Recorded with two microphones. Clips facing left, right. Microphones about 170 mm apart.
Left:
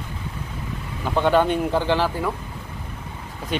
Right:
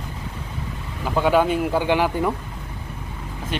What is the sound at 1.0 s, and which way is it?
Speech, 5° right (ahead or behind).